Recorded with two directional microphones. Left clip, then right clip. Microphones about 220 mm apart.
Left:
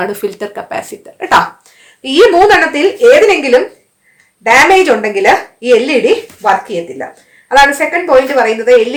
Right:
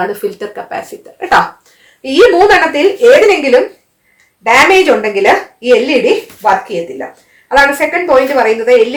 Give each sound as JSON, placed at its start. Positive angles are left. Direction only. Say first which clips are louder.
{"t": 0.0, "sound": "speech", "louder": "even", "side_deg": 35}
{"t": 2.0, "sound": "speech", "louder": "even", "side_deg": 20}